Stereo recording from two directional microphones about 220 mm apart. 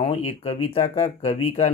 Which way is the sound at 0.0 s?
25° left (ahead or behind).